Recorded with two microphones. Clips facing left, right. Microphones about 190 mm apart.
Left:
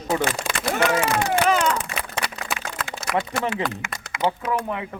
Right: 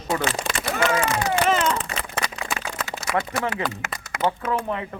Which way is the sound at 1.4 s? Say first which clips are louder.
Even; centre (ahead or behind).